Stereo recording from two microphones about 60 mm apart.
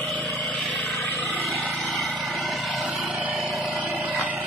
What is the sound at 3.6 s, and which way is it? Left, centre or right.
Vehicle, right.